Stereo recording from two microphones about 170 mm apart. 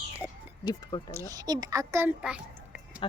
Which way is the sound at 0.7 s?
25° left (ahead or behind).